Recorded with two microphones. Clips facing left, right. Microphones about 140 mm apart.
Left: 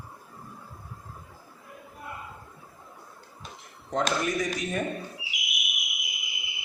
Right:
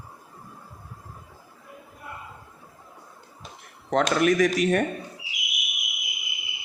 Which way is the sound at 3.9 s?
85° right.